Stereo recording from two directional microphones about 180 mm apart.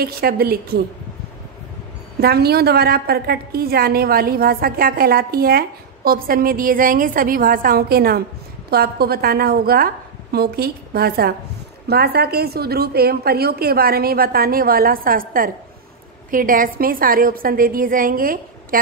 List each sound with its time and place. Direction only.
0.0 s a woman's voice: 55° right (ahead or behind)
2.1 s a woman's voice: 60° right (ahead or behind)